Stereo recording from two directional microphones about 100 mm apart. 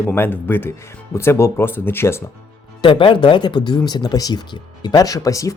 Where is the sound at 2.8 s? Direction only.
55° left (ahead or behind).